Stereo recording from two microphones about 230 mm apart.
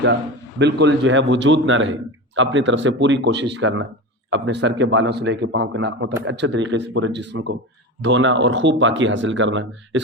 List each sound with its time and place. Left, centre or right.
0.6 s a man's voice: right